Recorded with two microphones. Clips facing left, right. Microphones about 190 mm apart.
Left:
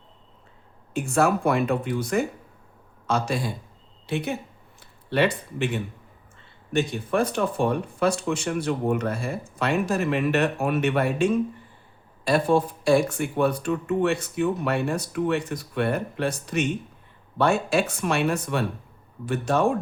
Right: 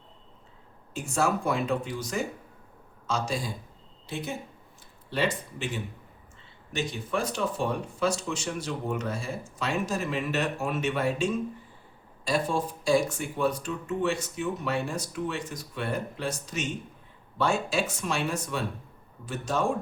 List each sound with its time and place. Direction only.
0.9 s speech: 60° left (ahead or behind)